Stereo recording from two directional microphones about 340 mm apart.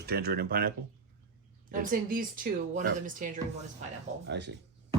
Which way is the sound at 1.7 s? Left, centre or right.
Right.